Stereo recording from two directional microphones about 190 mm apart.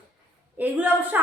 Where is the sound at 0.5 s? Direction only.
10° right (ahead or behind).